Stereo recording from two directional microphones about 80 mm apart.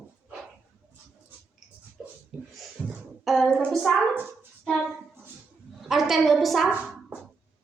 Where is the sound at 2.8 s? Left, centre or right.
Centre.